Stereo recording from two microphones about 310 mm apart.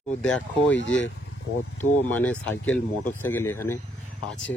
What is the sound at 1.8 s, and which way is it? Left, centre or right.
Speech, centre.